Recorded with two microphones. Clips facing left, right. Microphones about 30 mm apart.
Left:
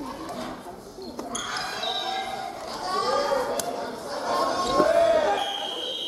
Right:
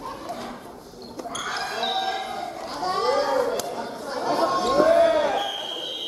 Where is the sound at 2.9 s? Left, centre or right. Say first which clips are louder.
Right 2 dB; centre.